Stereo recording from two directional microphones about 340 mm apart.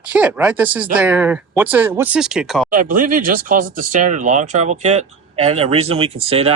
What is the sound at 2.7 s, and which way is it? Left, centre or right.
Speech, right.